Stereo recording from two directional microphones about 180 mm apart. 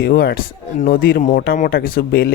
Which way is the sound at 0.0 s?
60° left (ahead or behind).